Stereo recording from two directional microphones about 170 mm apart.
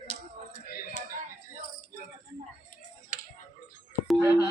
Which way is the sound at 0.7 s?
55° left (ahead or behind).